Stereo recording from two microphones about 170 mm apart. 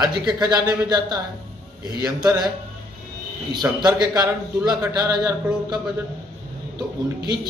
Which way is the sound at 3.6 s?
15° right (ahead or behind).